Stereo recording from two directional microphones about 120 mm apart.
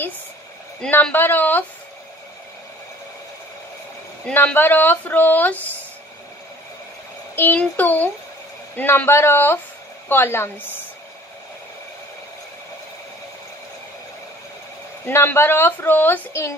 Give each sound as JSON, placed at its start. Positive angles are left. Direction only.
{"t": 0.7, "sound": "a woman's voice", "side_deg": 10}
{"t": 4.3, "sound": "a woman's voice", "side_deg": 15}
{"t": 7.3, "sound": "a woman's voice", "side_deg": 15}
{"t": 15.0, "sound": "a woman's voice", "side_deg": 20}